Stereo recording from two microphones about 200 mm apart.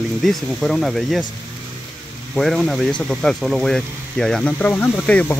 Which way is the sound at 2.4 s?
Centre (ahead or behind).